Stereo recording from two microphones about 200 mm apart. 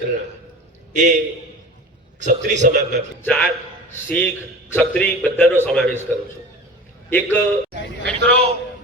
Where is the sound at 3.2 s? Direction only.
5° left (ahead or behind).